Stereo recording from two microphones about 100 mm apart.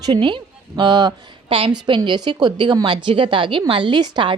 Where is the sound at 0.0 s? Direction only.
50° right (ahead or behind).